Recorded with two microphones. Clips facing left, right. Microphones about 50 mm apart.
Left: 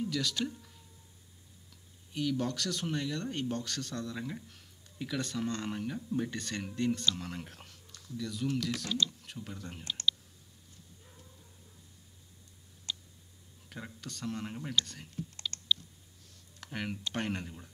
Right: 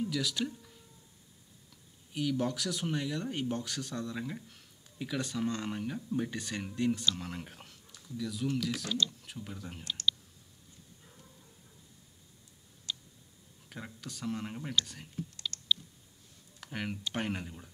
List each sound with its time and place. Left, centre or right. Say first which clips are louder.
0.0 s speech: even; centre
2.1 s speech: right 1 dB; centre
13.7 s speech: even; centre
15.5 s typing: left 1 dB; left
16.5 s speech: even; centre